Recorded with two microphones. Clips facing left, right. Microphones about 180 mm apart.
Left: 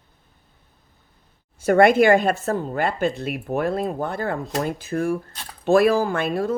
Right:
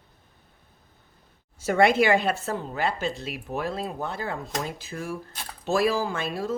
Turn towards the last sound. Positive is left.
turn(degrees=60)  # may be behind; listen again after turning